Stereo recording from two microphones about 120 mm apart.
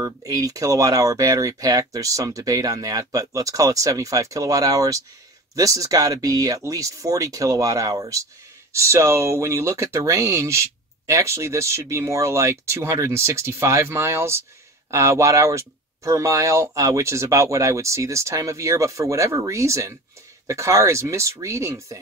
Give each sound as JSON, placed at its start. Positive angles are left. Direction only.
{"t": 0.0, "sound": "speech", "side_deg": -30}